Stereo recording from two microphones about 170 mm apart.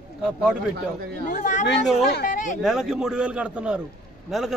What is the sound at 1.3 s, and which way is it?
Speech, 45° left (ahead or behind).